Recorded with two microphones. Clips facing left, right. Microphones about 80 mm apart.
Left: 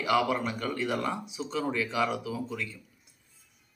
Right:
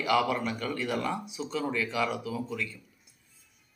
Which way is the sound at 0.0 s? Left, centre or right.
Left.